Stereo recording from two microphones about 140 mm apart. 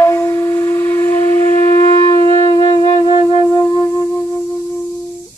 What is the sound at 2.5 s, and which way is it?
Music, 30° left (ahead or behind).